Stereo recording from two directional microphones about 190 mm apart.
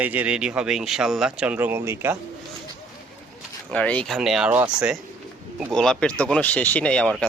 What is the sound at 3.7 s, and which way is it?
Speech, 5° left (ahead or behind).